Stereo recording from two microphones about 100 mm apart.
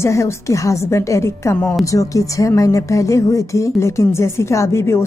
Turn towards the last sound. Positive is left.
turn(degrees=25)  # may be behind; listen again after turning